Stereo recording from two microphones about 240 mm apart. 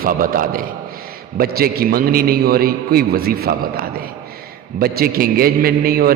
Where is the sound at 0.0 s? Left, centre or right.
Right.